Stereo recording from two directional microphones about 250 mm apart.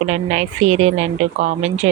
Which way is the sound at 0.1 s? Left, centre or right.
Right.